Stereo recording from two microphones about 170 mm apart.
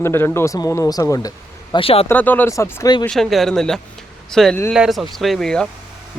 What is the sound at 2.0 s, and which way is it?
Speech, 10° left (ahead or behind).